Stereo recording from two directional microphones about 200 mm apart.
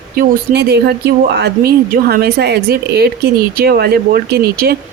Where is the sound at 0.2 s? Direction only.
55° right (ahead or behind).